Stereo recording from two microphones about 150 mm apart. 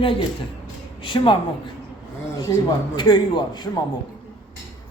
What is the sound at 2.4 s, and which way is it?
A man's voice, 25° left (ahead or behind).